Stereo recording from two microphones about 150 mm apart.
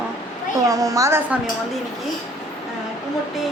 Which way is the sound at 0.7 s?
20° right (ahead or behind).